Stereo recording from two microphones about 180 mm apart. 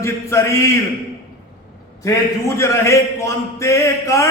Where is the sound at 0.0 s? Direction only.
15° left (ahead or behind).